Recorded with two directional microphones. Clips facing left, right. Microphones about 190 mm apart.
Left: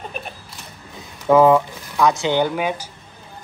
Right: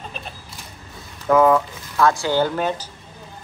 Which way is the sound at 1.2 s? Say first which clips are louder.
Left 2 dB; 25° left (ahead or behind).